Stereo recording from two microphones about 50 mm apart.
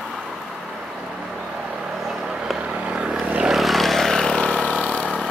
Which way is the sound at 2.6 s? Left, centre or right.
Right.